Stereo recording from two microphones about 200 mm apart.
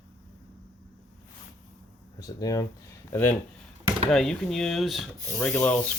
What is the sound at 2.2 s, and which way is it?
Speech, 20° left (ahead or behind).